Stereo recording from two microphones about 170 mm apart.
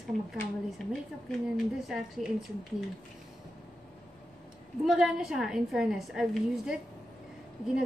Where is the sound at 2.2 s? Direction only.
45° right (ahead or behind).